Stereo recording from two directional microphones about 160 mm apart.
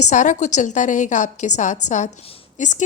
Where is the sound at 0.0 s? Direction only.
50° left (ahead or behind).